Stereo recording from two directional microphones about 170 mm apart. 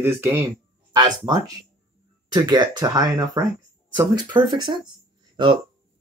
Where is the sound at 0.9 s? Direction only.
25° right (ahead or behind).